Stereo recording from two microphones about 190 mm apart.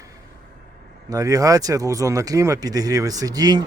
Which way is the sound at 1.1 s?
20° right (ahead or behind).